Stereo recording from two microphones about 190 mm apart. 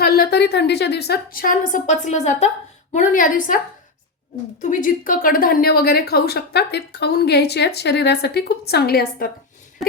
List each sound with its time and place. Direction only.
0.0 s a woman's voice: 55° left (ahead or behind)
4.6 s a woman's voice: 45° left (ahead or behind)